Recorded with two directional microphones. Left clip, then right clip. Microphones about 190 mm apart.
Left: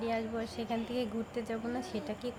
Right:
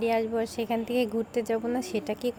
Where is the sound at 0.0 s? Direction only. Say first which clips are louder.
Right 9 dB; 40° right (ahead or behind).